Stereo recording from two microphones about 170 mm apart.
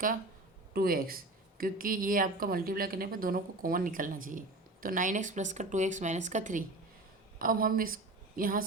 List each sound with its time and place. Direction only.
0.7 s speech: 60° right (ahead or behind)